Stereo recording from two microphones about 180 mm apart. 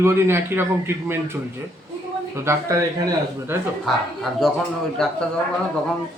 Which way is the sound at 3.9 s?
Centre (ahead or behind).